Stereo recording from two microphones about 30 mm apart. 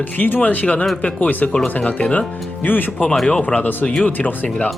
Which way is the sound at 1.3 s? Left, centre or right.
Left.